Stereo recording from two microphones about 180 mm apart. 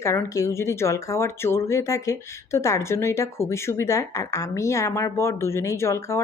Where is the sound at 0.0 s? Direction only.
15° left (ahead or behind).